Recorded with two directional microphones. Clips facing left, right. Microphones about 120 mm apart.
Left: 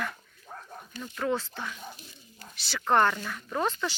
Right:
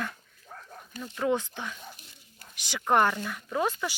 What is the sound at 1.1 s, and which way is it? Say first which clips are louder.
Speech: right 2 dB; 15° right (ahead or behind).